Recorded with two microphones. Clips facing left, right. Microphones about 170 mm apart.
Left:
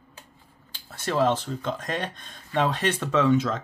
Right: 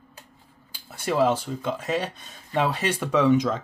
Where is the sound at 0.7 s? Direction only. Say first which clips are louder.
Right 2 dB; 10° right (ahead or behind).